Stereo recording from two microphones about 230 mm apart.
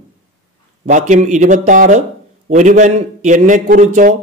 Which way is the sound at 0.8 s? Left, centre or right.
Right.